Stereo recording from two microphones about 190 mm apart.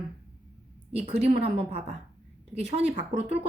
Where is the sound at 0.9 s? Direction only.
35° right (ahead or behind).